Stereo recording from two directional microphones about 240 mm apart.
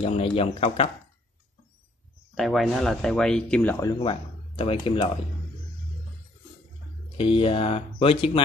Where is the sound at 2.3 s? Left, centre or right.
Centre.